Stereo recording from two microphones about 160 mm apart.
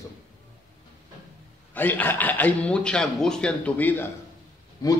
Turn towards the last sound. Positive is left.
turn(degrees=25)  # may be behind; listen again after turning